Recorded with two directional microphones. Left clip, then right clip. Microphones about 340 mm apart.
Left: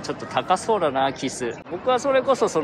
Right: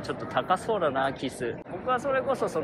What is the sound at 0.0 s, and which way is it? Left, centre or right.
Speech, centre.